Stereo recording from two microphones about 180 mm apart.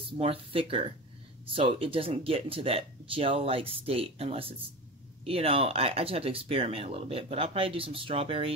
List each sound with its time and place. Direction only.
0.0 s speech: 30° right (ahead or behind)